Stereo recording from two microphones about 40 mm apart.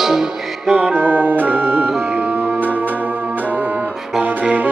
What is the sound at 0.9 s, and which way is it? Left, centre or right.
Music, right.